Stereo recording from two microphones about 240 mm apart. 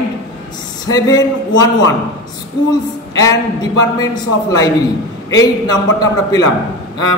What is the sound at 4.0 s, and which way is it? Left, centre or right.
Speech, centre.